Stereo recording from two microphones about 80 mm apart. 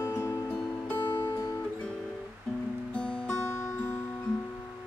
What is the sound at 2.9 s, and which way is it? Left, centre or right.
Music, centre.